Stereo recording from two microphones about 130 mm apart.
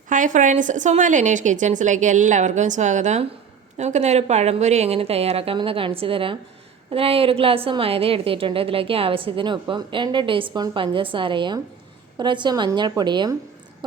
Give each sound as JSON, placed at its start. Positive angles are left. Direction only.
{"t": 0.1, "sound": "a woman's voice", "side_deg": -85}